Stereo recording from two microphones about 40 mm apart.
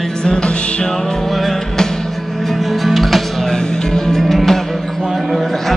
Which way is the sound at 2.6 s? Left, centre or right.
Centre.